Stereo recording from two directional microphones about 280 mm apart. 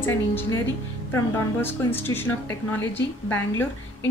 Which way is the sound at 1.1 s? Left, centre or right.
Centre.